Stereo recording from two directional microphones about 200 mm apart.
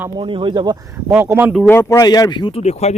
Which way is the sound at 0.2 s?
25° right (ahead or behind).